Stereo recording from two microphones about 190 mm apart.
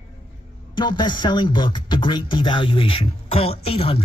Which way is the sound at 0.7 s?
25° left (ahead or behind).